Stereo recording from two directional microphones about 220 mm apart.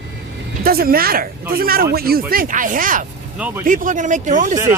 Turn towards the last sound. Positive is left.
turn(degrees=-35)  # may be behind; listen again after turning